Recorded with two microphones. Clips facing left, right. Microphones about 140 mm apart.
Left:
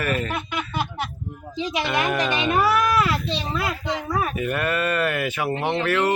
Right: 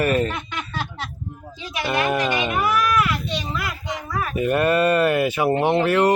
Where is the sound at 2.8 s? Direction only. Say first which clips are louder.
Even; 30° left (ahead or behind).